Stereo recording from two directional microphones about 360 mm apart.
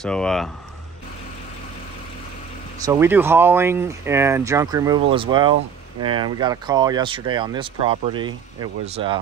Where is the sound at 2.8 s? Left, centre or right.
Centre.